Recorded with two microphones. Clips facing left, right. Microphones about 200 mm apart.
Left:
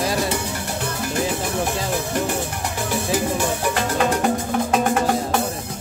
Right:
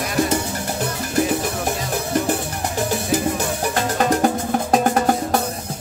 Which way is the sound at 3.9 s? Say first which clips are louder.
Right 2 dB; 40° right (ahead or behind).